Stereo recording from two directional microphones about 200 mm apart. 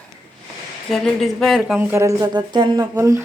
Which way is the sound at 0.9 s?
Centre (ahead or behind).